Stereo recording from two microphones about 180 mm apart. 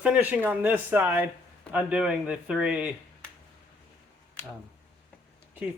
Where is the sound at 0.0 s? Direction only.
10° right (ahead or behind).